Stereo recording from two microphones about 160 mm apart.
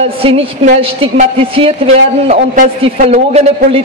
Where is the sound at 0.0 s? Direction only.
35° right (ahead or behind).